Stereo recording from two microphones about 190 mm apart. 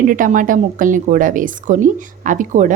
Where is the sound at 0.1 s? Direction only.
45° right (ahead or behind).